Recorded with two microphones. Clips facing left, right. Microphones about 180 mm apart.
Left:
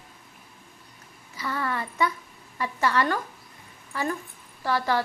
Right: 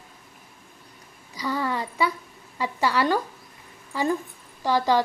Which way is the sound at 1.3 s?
15° right (ahead or behind).